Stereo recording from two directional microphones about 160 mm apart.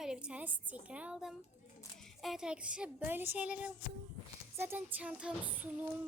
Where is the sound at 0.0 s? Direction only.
5° right (ahead or behind).